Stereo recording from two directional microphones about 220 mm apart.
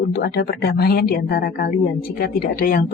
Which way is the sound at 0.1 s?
45° left (ahead or behind).